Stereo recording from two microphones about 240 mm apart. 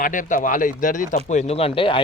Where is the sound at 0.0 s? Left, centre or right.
Left.